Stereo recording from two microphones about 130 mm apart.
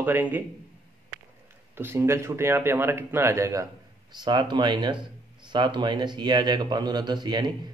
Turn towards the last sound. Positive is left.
turn(degrees=-35)  # may be behind; listen again after turning